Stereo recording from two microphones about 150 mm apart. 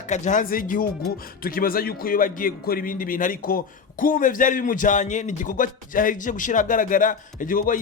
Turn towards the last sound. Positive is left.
turn(degrees=65)  # may be behind; listen again after turning